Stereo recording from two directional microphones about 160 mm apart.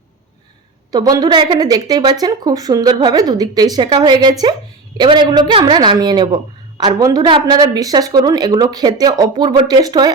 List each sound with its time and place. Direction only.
0.9 s speech: 25° right (ahead or behind)